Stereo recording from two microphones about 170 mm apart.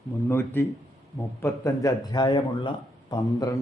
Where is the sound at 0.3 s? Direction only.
15° left (ahead or behind).